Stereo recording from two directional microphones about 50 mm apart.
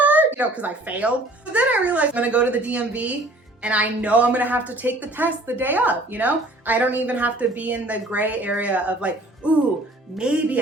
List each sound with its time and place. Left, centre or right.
0.0 s a woman's voice: right